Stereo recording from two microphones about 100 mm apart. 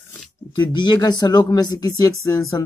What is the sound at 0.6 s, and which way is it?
Speech, 50° left (ahead or behind).